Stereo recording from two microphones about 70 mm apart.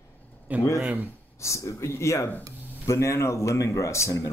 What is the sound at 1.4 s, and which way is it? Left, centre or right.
Speech, left.